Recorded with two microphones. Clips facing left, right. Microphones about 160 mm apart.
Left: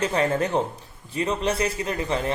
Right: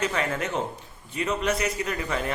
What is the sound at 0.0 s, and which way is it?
A man's voice, 35° left (ahead or behind).